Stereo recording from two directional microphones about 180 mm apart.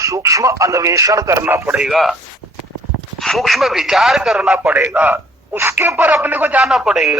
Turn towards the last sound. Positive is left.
turn(degrees=-5)  # may be behind; listen again after turning